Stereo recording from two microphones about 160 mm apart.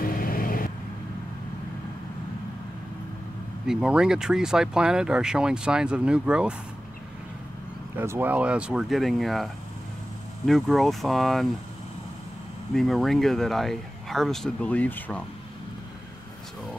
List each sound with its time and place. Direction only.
0.0 s vehicle: 65° left (ahead or behind)
3.6 s speech: 5° right (ahead or behind)
8.0 s speech: 15° right (ahead or behind)
12.7 s speech: centre (ahead or behind)